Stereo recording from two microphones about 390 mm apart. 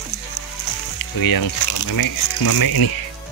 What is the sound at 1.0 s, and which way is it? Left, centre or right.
Speech, left.